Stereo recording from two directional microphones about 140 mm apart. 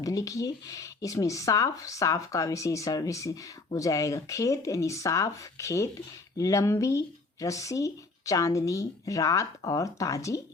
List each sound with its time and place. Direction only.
0.0 s speech: 25° left (ahead or behind)